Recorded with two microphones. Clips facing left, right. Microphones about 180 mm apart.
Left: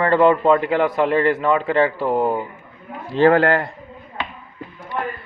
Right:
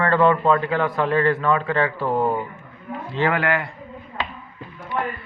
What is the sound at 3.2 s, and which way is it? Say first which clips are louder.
Speech: left 7 dB; 40° left (ahead or behind).